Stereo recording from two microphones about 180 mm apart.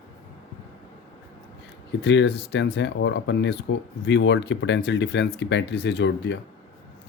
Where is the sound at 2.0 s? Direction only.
80° left.